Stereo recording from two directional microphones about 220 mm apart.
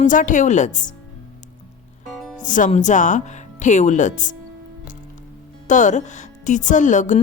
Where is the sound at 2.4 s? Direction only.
35° left (ahead or behind).